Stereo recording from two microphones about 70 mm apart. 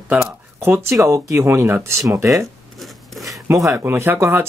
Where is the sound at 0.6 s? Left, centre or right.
Right.